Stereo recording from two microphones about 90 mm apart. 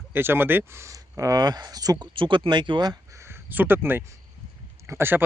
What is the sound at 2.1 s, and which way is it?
Speech, 70° right (ahead or behind).